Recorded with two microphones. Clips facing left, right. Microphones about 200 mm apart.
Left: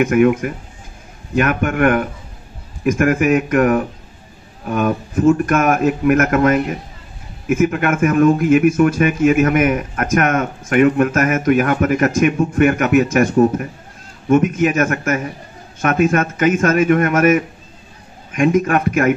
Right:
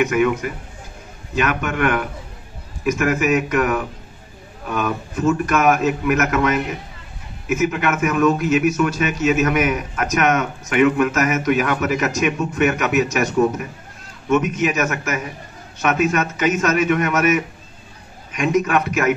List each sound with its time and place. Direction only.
0.0 s speech: 50° left (ahead or behind)
14.3 s speech: 50° left (ahead or behind)